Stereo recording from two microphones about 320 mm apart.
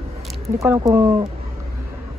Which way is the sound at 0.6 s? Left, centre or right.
Centre.